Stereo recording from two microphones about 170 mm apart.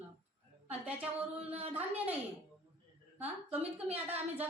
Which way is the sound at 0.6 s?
10° right (ahead or behind).